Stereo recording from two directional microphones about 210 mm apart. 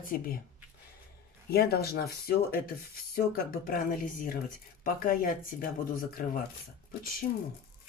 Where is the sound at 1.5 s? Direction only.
45° left (ahead or behind).